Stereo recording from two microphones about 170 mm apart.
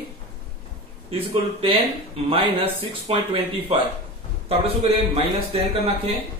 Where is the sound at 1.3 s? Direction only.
30° right (ahead or behind).